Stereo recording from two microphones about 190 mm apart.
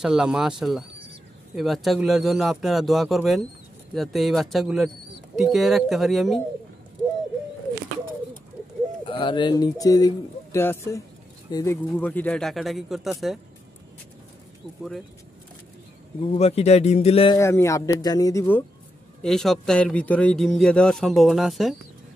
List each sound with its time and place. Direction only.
0.0 s a man's voice: 5° right (ahead or behind)
9.0 s a man's voice: 25° left (ahead or behind); by 13.4 s centre (ahead or behind)
16.3 s speech: 35° left (ahead or behind)
17.4 s speech: 15° left (ahead or behind)
19.2 s a man's voice: centre (ahead or behind)